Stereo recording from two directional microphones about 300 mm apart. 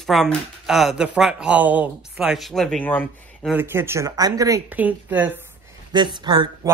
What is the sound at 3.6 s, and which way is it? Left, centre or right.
Speech, centre.